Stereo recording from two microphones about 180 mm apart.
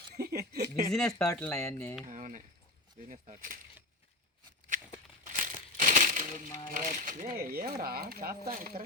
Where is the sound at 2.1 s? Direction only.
45° right (ahead or behind).